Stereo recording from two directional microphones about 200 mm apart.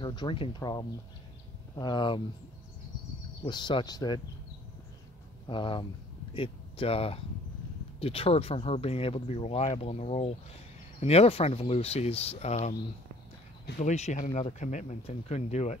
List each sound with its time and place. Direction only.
0.0 s speech: 20° left (ahead or behind)
3.4 s speech: 20° left (ahead or behind)
5.5 s speech: 25° left (ahead or behind)
13.7 s speech: 35° left (ahead or behind)